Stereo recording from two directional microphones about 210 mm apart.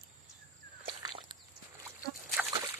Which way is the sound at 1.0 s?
25° right (ahead or behind).